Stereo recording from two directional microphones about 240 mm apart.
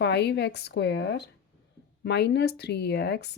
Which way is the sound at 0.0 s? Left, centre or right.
Left.